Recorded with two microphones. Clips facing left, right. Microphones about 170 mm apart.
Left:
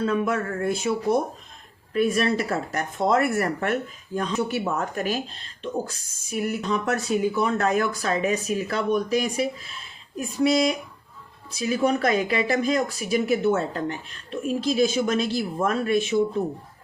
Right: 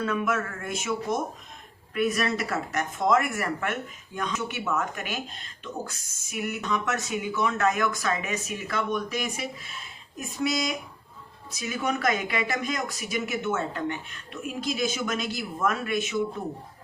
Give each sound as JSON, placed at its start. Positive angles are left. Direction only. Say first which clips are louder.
{"t": 0.0, "sound": "speech", "louder": "left 3 dB", "side_deg": 30}